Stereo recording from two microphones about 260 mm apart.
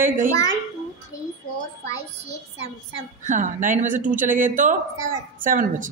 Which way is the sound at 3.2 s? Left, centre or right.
Right.